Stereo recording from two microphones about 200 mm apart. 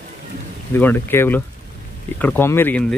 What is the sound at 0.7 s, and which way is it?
Speech, 10° left (ahead or behind).